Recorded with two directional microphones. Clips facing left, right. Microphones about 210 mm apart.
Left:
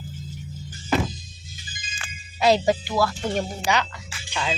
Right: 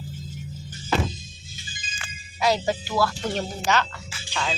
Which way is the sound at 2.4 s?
25° left (ahead or behind).